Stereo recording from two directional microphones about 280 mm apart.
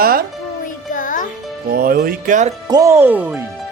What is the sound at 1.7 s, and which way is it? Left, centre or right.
Speech, right.